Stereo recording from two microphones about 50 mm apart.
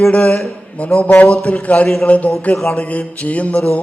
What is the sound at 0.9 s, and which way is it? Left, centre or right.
A man's voice, left.